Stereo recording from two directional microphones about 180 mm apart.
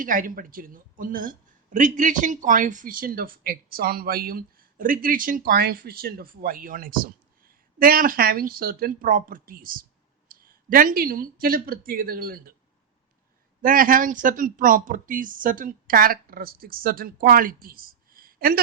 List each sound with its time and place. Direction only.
0.0 s a woman's voice: 50° right (ahead or behind)
13.6 s a woman's voice: 50° right (ahead or behind)